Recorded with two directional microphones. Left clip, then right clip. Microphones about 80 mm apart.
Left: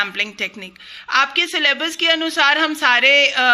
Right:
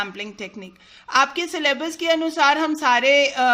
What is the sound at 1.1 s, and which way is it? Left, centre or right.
A woman's voice, right.